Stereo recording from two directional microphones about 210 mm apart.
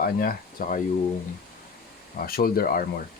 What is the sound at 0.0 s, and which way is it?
Speech, 45° left (ahead or behind).